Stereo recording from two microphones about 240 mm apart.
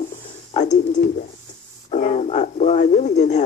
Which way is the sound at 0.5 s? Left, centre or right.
Left.